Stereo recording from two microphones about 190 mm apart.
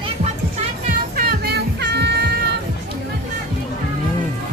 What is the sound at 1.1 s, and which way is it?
Music, 55° right (ahead or behind).